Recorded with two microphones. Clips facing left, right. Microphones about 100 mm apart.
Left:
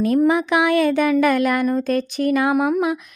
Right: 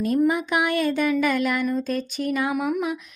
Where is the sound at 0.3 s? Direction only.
90° left.